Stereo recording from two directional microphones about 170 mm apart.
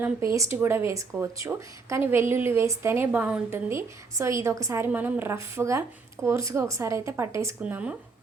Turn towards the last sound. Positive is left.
turn(degrees=-10)  # may be behind; listen again after turning